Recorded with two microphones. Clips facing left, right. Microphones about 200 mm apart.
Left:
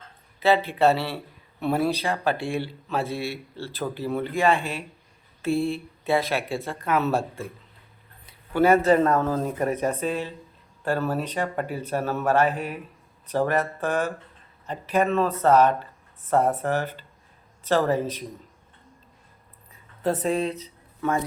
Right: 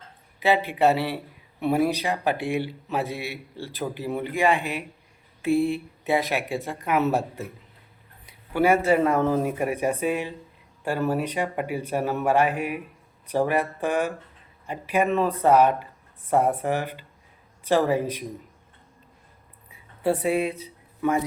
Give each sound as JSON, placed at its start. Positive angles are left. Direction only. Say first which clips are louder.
{"t": 0.3, "sound": "a man's voice", "louder": "left 1 dB", "side_deg": -15}
{"t": 19.7, "sound": "speech", "louder": "right 1 dB", "side_deg": -10}